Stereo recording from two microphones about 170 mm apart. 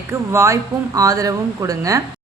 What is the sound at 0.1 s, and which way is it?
Speech, 15° right (ahead or behind).